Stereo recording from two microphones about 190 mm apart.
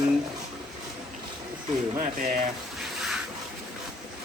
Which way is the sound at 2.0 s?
50° right (ahead or behind).